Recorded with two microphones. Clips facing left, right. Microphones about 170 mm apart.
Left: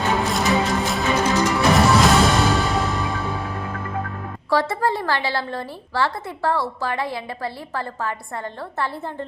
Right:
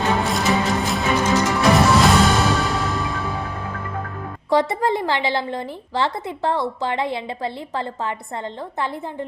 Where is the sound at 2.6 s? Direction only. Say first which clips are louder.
Left 1 dB; centre (ahead or behind).